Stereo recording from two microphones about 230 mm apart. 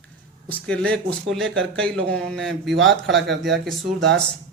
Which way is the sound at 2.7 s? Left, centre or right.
Right.